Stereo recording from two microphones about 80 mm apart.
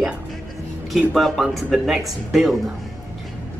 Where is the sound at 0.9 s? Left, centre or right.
Centre.